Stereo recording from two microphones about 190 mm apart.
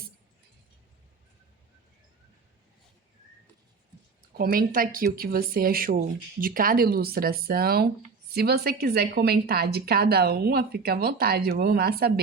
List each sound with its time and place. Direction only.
4.4 s a woman's voice: 50° right (ahead or behind)